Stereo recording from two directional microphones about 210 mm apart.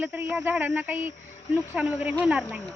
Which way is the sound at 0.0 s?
10° right (ahead or behind).